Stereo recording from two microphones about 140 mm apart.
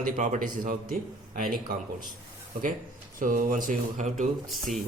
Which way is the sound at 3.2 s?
75° right (ahead or behind).